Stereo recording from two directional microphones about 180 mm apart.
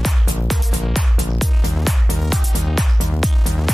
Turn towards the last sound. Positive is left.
turn(degrees=0)  # may be behind; listen again after turning